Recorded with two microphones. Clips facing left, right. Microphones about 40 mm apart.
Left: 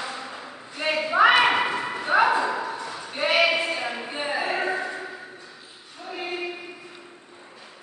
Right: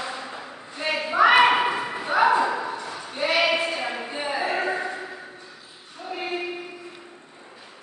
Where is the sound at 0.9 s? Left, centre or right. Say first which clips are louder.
Even; centre.